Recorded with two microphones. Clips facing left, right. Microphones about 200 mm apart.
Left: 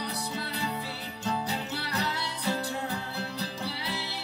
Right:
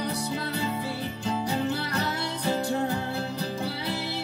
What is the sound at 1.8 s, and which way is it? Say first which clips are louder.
Music: right 3 dB; 50° right (ahead or behind).